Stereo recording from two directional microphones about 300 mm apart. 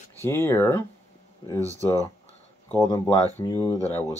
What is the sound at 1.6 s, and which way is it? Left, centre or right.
Speech, centre.